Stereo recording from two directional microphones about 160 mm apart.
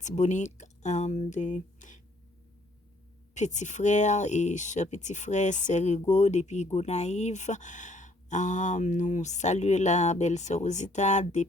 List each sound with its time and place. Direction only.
0.0 s speech: 50° left (ahead or behind)
3.3 s speech: 50° left (ahead or behind)